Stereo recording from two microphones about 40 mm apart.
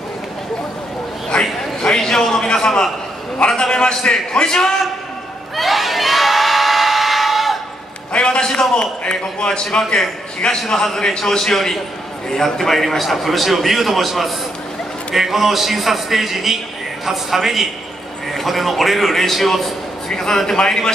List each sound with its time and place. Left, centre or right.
1.4 s a man's voice: centre
5.6 s crowd: centre
8.1 s a man's voice: left